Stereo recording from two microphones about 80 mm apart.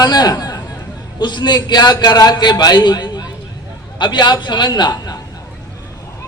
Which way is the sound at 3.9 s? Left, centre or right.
Left.